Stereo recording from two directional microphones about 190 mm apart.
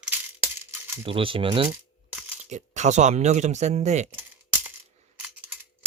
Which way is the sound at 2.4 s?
40° right (ahead or behind).